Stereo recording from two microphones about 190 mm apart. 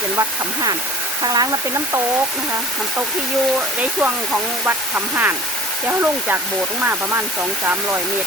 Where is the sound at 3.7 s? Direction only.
5° right (ahead or behind).